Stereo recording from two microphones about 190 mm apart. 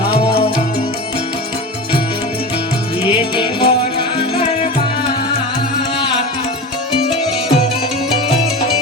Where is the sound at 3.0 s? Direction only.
25° left (ahead or behind).